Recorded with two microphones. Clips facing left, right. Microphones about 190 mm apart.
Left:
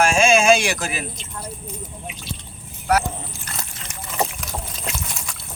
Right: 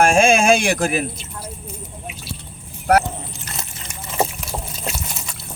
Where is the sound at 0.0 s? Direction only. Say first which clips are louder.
Right 2 dB; 55° right (ahead or behind).